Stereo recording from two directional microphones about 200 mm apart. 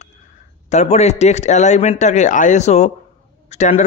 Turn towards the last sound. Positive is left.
turn(degrees=35)  # may be behind; listen again after turning